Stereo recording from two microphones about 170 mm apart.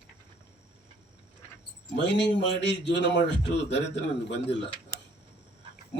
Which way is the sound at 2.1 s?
90° left.